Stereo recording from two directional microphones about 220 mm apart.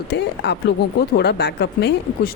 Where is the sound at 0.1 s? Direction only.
50° left (ahead or behind).